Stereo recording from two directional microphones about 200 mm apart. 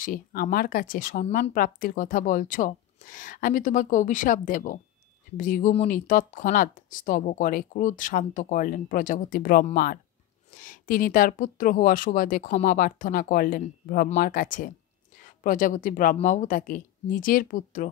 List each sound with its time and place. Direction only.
0.0 s speech: 45° left (ahead or behind)